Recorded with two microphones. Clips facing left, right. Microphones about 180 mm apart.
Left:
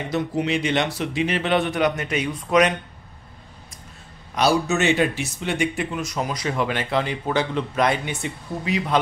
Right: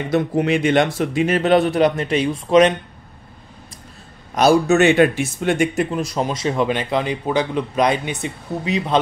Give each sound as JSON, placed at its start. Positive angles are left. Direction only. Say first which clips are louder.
{"t": 0.1, "sound": "a man's voice", "louder": "right 6 dB", "side_deg": -50}
{"t": 4.4, "sound": "a man's voice", "louder": "right 6 dB", "side_deg": -50}
{"t": 5.9, "sound": "speech", "louder": "right 5 dB", "side_deg": -35}